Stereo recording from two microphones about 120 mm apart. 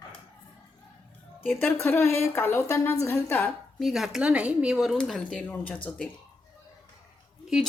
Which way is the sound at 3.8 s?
Centre (ahead or behind).